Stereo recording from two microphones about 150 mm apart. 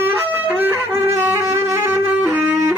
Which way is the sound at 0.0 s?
15° right (ahead or behind).